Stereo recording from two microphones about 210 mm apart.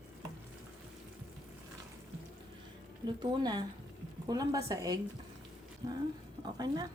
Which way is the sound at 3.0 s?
20° right (ahead or behind).